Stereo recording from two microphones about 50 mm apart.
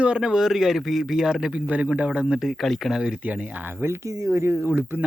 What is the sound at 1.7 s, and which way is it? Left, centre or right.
Speech, right.